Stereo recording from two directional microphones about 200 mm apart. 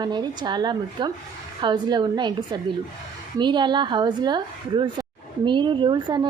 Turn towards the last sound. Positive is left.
turn(degrees=-20)  # may be behind; listen again after turning